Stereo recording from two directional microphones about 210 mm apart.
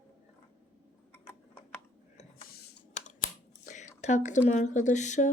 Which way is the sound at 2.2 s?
45° left (ahead or behind).